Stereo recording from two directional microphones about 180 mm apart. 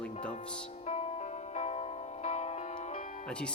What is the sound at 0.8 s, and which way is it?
Music, 35° left (ahead or behind).